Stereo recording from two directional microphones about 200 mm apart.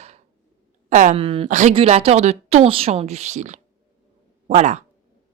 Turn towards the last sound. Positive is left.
turn(degrees=-35)  # may be behind; listen again after turning